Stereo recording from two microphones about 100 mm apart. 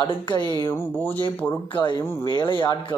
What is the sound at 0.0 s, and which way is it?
Speech, 50° left (ahead or behind).